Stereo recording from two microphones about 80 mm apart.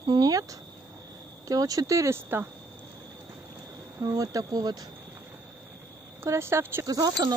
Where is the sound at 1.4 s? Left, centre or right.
Right.